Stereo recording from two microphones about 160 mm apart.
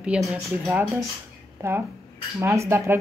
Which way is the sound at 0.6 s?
15° right (ahead or behind).